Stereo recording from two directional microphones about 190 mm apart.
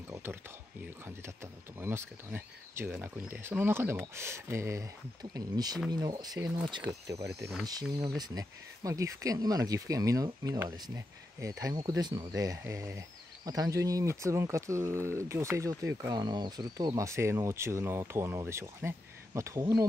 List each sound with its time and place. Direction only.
0.1 s speech: 10° right (ahead or behind)